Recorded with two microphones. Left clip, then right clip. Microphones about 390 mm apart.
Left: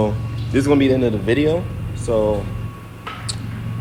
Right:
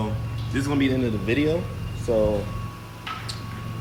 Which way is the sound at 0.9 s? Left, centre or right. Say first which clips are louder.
Left 7 dB; left.